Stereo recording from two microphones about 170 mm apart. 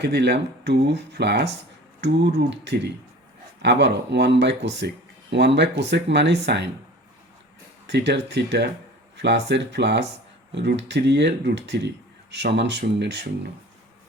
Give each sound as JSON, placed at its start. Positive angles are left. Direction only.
{"t": 0.0, "sound": "speech", "side_deg": -80}
{"t": 2.0, "sound": "speech", "side_deg": -90}
{"t": 7.9, "sound": "speech", "side_deg": -90}